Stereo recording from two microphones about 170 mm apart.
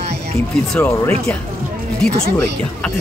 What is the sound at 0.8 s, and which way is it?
Speech, 15° left (ahead or behind).